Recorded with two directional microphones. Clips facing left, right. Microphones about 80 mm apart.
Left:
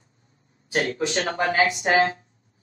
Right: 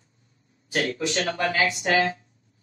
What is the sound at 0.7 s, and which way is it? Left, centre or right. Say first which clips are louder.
Speech: left 2 dB; left.